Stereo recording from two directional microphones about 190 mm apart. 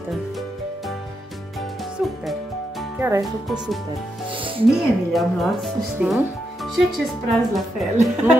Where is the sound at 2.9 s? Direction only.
10° right (ahead or behind).